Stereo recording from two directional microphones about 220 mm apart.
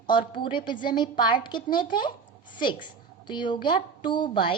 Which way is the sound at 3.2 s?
20° left (ahead or behind).